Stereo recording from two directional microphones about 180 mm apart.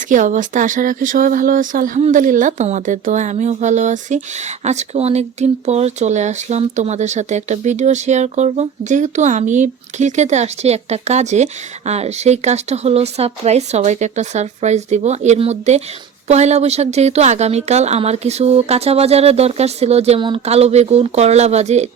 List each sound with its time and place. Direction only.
0.1 s speech: 45° right (ahead or behind)